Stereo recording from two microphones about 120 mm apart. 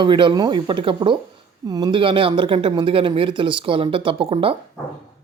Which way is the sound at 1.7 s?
35° right (ahead or behind).